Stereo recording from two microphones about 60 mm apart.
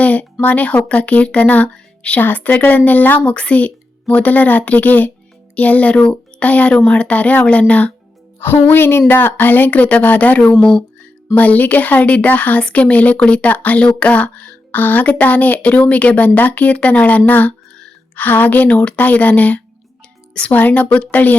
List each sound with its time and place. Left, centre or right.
0.0 s a sound: left
0.4 s speech: left
8.4 s speech: left
10.5 s speech: centre
11.3 s speech: left